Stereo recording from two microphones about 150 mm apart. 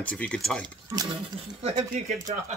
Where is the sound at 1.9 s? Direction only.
55° right (ahead or behind).